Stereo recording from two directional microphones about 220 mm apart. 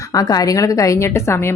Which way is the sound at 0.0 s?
15° left (ahead or behind).